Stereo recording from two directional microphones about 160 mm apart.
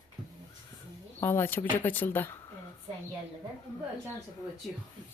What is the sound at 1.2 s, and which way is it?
Speech, 15° left (ahead or behind).